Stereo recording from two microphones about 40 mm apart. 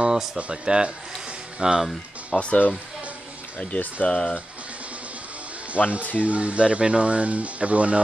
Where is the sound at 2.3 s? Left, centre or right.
Left.